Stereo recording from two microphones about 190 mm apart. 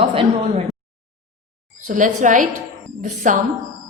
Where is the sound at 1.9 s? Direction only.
40° right (ahead or behind).